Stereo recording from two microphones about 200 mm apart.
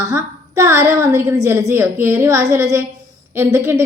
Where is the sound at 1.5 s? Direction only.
15° right (ahead or behind).